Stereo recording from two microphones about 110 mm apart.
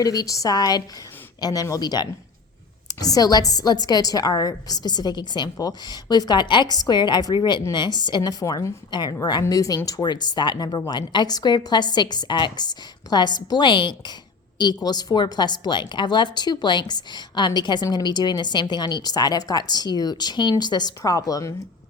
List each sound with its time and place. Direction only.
0.0 s speech: 35° left (ahead or behind)